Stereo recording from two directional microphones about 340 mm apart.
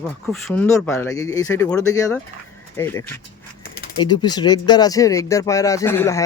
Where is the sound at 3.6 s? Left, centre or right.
Left.